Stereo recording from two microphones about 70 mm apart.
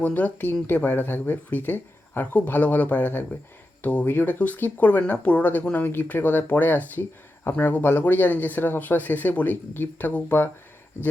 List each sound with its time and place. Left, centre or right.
0.0 s speech: left